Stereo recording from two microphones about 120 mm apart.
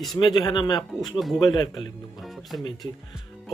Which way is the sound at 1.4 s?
35° left (ahead or behind).